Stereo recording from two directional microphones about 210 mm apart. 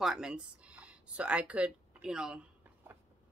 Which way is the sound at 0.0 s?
5° right (ahead or behind).